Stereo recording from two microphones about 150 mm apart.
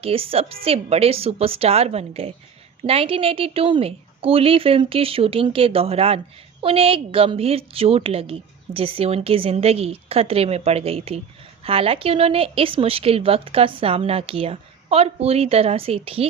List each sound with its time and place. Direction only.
0.0 s a woman's voice: 40° right (ahead or behind)